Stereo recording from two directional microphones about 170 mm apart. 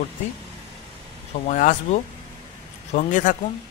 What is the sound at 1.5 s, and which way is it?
A man's voice, 45° left (ahead or behind).